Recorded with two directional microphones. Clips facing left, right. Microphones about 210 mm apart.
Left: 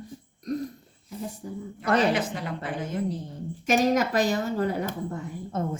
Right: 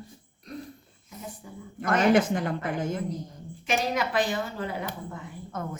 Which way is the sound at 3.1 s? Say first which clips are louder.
Left 4 dB; 30° left (ahead or behind).